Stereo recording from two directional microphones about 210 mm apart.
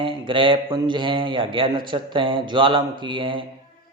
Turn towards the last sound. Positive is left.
turn(degrees=-25)  # may be behind; listen again after turning